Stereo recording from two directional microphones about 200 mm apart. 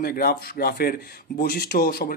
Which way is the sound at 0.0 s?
50° left (ahead or behind).